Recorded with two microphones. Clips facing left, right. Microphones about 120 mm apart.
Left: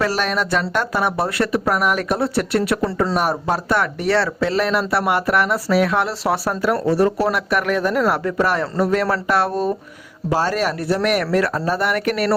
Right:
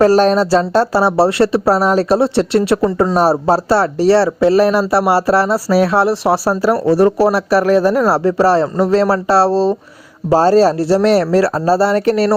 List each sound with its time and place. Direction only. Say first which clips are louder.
0.0 s speech: right 10 dB; 40° right (ahead or behind)